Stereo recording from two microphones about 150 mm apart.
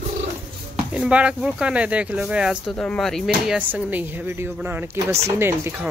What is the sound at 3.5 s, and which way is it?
Speech, 10° right (ahead or behind).